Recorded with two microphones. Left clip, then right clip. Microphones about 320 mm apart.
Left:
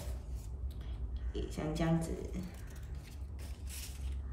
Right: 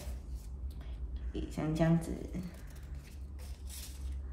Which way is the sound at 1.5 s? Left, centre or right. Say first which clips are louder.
Right 4 dB; centre.